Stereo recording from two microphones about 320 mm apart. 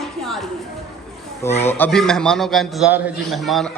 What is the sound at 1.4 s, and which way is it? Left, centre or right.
A man's voice, centre.